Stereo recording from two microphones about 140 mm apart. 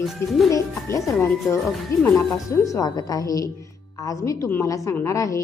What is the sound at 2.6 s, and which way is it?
A woman's voice, 25° left (ahead or behind).